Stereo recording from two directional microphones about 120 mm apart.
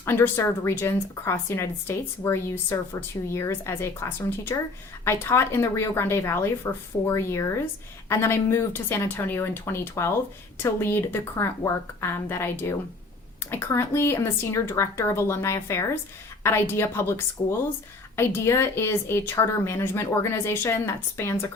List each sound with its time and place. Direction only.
0.0 s a woman's voice: 20° left (ahead or behind)